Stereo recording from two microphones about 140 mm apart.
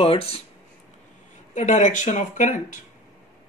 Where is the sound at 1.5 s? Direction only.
60° left (ahead or behind).